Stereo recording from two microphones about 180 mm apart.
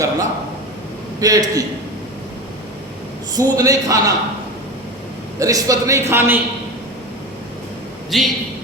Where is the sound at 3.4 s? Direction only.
20° right (ahead or behind).